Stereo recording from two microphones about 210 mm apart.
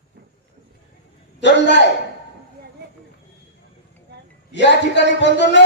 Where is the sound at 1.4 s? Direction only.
55° left (ahead or behind).